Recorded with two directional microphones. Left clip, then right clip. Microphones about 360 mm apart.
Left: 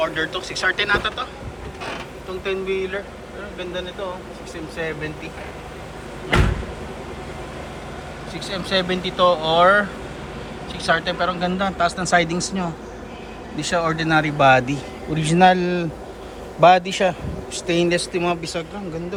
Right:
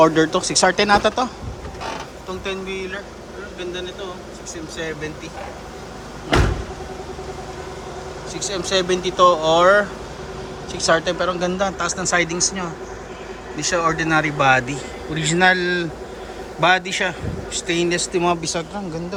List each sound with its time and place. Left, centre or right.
0.0 s speech: centre
2.4 s speech: centre
8.3 s a man's voice: centre